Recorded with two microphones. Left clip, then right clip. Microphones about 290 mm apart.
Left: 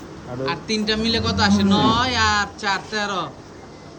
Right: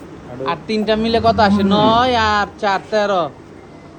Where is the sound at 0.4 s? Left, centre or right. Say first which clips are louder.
Right 5 dB; centre.